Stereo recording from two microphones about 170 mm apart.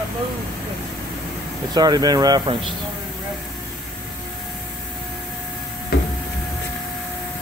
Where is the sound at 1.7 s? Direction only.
25° right (ahead or behind).